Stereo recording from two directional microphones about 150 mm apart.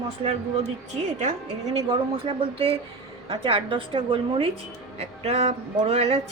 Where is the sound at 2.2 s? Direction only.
40° right (ahead or behind).